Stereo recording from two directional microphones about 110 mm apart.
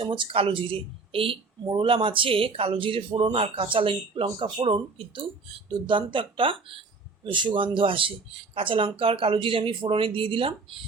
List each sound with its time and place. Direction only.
0.0 s speech: 45° right (ahead or behind)